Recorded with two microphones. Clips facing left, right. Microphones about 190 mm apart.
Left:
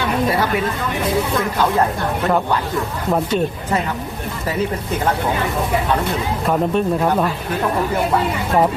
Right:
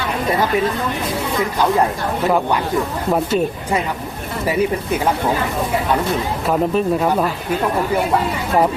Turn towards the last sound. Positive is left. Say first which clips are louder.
# even
turn(degrees=-5)  # may be behind; listen again after turning